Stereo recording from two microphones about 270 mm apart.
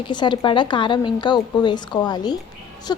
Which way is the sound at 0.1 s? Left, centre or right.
Centre.